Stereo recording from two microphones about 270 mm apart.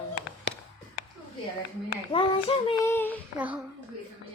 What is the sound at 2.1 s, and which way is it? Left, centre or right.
A child's voice, centre.